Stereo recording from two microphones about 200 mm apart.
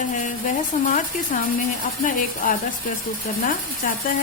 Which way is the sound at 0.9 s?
40° left (ahead or behind).